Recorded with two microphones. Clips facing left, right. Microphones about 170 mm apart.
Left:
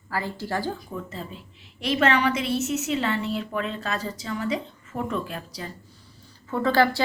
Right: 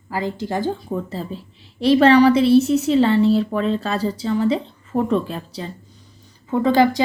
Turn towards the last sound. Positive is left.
turn(degrees=-15)  # may be behind; listen again after turning